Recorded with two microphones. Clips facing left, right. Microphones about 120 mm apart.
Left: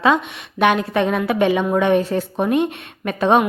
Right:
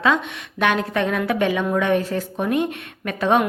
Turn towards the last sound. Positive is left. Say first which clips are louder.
# left 3 dB
turn(degrees=20)  # may be behind; listen again after turning